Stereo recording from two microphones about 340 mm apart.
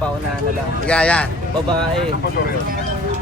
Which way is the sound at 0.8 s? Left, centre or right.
Centre.